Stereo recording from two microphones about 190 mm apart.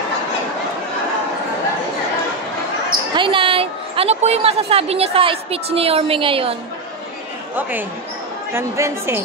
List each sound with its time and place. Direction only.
3.2 s a woman's voice: 25° right (ahead or behind)
8.5 s speech: 15° right (ahead or behind)